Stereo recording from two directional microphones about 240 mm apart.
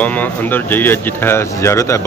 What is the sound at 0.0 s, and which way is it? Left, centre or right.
Speech, centre.